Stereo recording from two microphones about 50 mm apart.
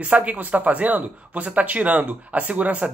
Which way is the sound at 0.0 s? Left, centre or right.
Right.